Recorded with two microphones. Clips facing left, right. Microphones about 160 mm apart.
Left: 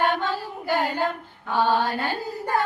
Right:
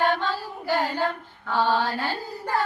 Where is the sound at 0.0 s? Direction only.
15° left (ahead or behind).